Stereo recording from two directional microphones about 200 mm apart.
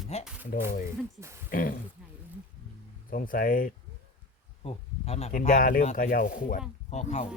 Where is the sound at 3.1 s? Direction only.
45° left (ahead or behind).